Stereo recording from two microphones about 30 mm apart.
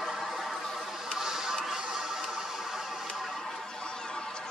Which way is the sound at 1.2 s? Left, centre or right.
Centre.